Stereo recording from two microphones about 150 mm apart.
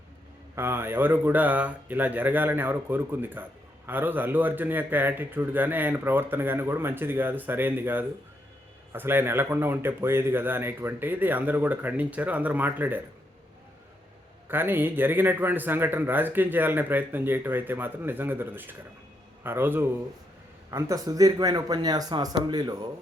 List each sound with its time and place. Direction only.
0.5 s a man's voice: 15° right (ahead or behind)
14.4 s a man's voice: 15° right (ahead or behind); by 22.9 s 30° right (ahead or behind)